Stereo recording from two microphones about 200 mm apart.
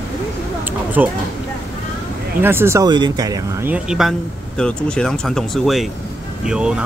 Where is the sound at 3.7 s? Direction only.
5° right (ahead or behind).